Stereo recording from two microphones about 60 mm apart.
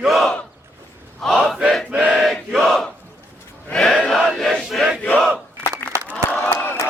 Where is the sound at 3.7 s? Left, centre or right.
Centre.